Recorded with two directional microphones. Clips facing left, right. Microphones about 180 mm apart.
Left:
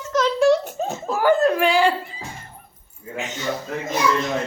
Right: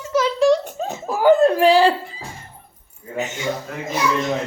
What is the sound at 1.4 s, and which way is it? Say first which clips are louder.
Speech: right 4 dB; 30° right (ahead or behind).